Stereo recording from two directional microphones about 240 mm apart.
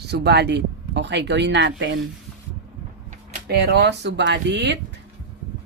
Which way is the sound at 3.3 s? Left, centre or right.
Right.